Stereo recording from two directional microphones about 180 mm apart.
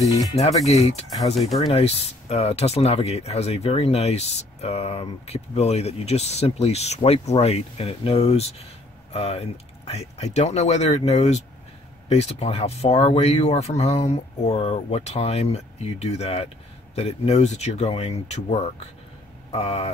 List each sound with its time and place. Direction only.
0.4 s speech: 35° left (ahead or behind)